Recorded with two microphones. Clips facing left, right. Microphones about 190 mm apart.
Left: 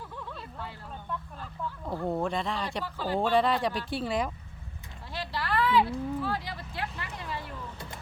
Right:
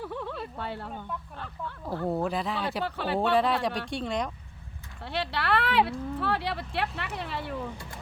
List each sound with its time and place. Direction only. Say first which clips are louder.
0.0 s a sound: right 7 dB; 65° right (ahead or behind)
1.9 s speech: right 1 dB; 5° right (ahead or behind)
2.8 s a woman's voice: right 2 dB; 70° right (ahead or behind)
3.2 s speech: even; centre (ahead or behind)
5.0 s a woman's voice: right 5 dB; 70° right (ahead or behind)